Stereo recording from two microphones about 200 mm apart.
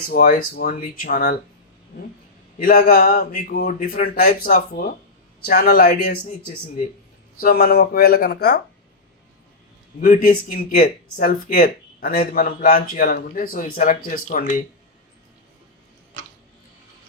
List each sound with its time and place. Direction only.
0.1 s speech: 50° left (ahead or behind)
2.6 s speech: 45° left (ahead or behind)
10.0 s speech: 45° left (ahead or behind)